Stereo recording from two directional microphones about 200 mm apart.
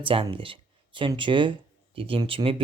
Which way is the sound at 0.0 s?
25° right (ahead or behind).